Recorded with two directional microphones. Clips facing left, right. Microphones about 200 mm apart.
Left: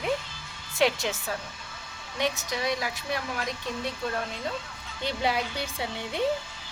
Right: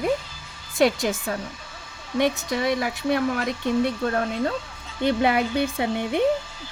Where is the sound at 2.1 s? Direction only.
55° right (ahead or behind).